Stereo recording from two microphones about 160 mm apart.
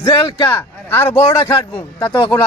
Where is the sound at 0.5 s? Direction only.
15° left (ahead or behind).